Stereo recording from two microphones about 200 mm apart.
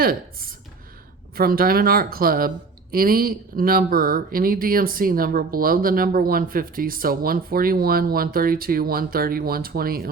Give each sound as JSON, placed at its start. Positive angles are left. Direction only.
{"t": 0.0, "sound": "speech", "side_deg": -45}